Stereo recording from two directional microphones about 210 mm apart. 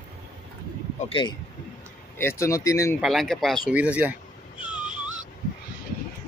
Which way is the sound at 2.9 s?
Centre (ahead or behind).